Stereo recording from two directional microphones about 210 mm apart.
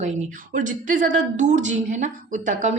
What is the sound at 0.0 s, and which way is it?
A woman's voice, 35° right (ahead or behind).